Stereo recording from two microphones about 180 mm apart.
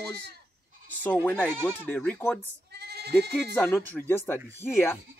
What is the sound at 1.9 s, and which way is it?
Speech, 10° left (ahead or behind).